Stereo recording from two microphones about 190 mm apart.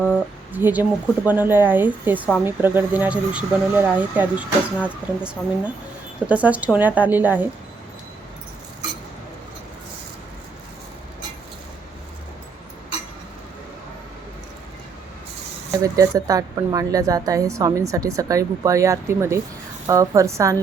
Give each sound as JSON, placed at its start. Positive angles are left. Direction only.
{"t": 0.0, "sound": "a woman's voice", "side_deg": -10}
{"t": 15.7, "sound": "a woman's voice", "side_deg": -15}